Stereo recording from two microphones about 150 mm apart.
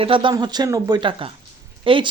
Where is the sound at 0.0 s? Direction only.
35° right (ahead or behind).